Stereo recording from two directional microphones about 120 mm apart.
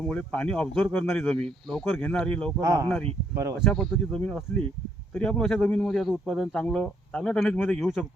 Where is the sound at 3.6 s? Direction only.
5° left (ahead or behind).